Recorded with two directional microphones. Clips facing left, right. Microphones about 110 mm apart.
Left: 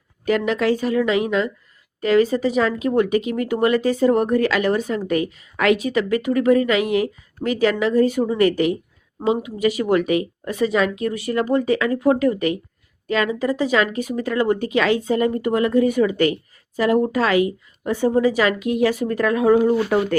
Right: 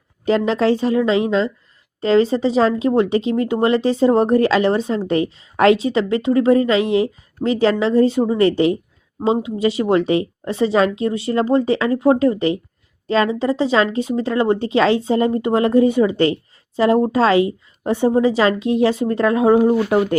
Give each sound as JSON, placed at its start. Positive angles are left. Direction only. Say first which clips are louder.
{"t": 0.3, "sound": "speech", "louder": "right 3 dB", "side_deg": -30}